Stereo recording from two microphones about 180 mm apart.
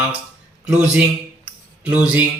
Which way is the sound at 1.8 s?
5° right (ahead or behind).